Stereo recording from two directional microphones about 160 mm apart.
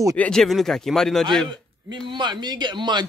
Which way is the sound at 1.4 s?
30° right (ahead or behind).